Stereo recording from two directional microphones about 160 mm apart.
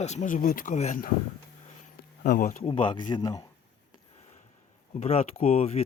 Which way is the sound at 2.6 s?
35° left (ahead or behind).